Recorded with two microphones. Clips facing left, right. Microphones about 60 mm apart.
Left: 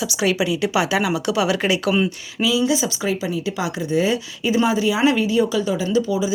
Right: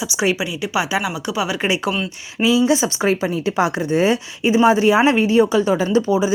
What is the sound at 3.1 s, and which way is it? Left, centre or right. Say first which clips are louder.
A woman's voice: right 4 dB; right.